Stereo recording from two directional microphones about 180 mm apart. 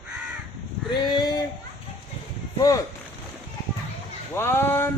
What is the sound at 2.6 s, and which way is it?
Speech, 20° left (ahead or behind).